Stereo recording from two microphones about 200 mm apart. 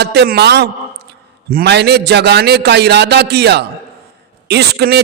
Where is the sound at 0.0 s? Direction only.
55° right (ahead or behind).